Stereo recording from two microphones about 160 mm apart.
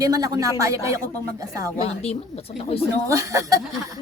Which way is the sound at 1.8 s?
40° left (ahead or behind).